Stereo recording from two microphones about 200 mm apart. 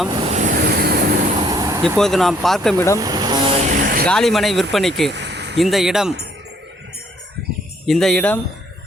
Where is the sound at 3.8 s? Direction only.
45° right (ahead or behind).